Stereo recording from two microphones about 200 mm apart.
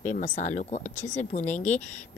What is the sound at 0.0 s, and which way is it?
Speech, 35° left (ahead or behind).